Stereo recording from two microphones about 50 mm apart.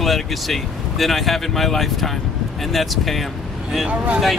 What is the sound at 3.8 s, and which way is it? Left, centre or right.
Speech, right.